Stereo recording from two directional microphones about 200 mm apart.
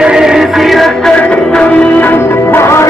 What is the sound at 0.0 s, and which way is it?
Music, 5° right (ahead or behind).